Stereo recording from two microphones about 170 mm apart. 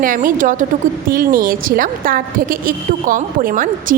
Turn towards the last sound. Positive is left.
turn(degrees=-55)  # may be behind; listen again after turning